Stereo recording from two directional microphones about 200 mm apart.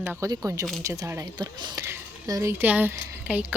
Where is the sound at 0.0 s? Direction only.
10° right (ahead or behind).